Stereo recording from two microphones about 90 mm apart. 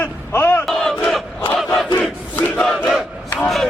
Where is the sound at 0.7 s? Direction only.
5° left (ahead or behind).